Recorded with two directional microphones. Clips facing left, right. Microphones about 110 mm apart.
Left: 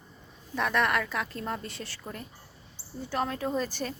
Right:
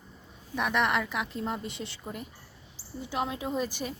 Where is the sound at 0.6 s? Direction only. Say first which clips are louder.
Even; 15° right (ahead or behind).